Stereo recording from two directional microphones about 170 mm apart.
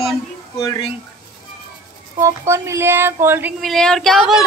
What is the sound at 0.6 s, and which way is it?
Speech, 30° left (ahead or behind).